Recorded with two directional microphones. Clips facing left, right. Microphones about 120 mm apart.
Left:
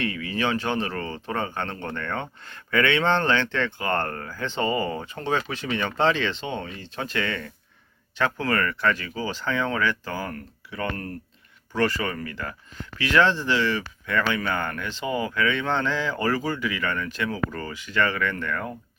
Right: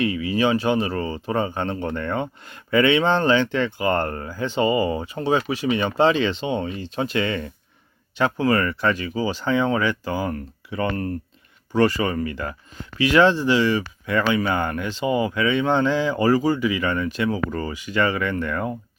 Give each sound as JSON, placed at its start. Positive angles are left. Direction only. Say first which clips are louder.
{"t": 0.0, "sound": "speech", "louder": "right 6 dB", "side_deg": -15}